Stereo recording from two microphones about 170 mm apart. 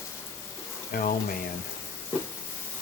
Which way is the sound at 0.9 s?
55° left (ahead or behind).